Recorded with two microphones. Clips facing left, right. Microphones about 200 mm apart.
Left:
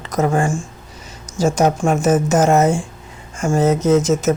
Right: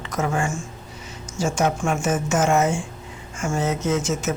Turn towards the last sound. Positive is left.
turn(degrees=40)  # may be behind; listen again after turning